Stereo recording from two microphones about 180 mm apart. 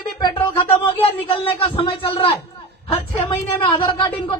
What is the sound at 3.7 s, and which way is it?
Speech, 25° left (ahead or behind).